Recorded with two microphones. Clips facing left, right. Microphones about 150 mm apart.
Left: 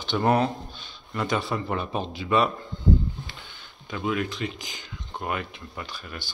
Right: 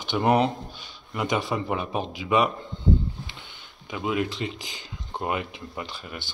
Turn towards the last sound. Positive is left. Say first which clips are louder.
# right 1 dB
turn(degrees=-20)  # may be behind; listen again after turning